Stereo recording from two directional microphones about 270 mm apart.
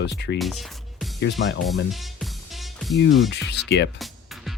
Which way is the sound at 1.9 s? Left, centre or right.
Centre.